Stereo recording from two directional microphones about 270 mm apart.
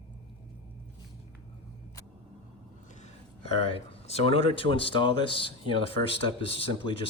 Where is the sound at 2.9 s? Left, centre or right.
Left.